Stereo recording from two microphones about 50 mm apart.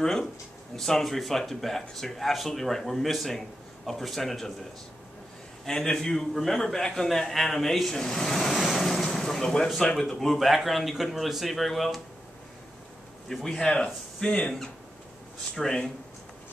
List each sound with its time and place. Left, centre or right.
0.0 s a man's voice: centre
5.7 s a man's voice: centre
8.6 s vehicle: centre
10.0 s speech: centre
13.3 s a man's voice: centre
14.2 s speech: left
15.5 s a man's voice: centre